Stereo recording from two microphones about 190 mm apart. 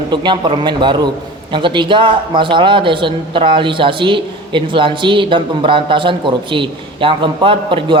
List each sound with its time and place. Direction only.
0.1 s speech: 25° right (ahead or behind)